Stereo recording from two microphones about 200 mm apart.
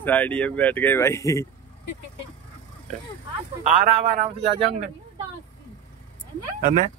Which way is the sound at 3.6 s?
40° right (ahead or behind).